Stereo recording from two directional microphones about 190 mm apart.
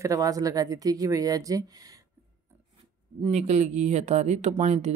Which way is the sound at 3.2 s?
35° right (ahead or behind).